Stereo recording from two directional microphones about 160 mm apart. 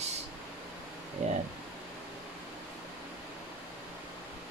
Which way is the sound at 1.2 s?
45° right (ahead or behind).